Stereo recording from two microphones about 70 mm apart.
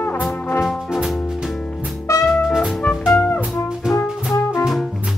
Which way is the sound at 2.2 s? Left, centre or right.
Centre.